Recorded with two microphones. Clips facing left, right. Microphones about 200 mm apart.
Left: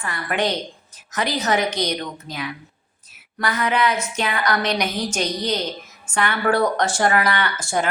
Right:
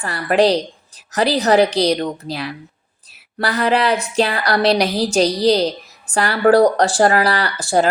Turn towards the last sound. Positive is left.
turn(degrees=-35)  # may be behind; listen again after turning